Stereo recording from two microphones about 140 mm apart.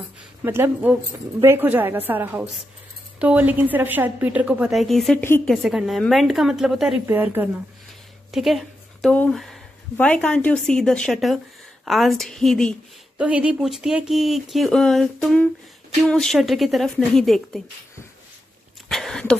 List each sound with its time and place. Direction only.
0.4 s a woman's voice: 15° right (ahead or behind)
7.1 s a woman's voice: 15° right (ahead or behind)
8.3 s a sound: centre (ahead or behind)
9.1 s speech: 5° left (ahead or behind)
13.2 s speech: 10° right (ahead or behind)
18.9 s a sound: 5° left (ahead or behind)